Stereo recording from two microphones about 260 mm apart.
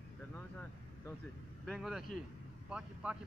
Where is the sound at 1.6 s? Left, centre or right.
Centre.